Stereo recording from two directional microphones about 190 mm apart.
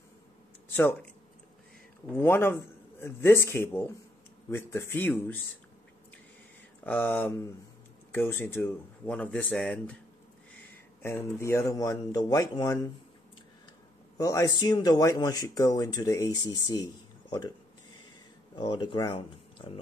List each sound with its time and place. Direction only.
0.7 s speech: 10° left (ahead or behind)
2.1 s speech: 10° left (ahead or behind)
6.8 s speech: 10° left (ahead or behind)
11.0 s speech: 10° left (ahead or behind)
14.1 s speech: 20° left (ahead or behind)
18.6 s speech: 25° left (ahead or behind)